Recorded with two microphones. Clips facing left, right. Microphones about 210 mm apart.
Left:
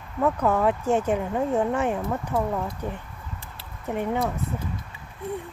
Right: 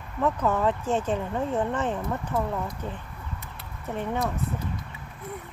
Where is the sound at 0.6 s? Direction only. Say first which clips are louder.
Left 3 dB; 10° left (ahead or behind).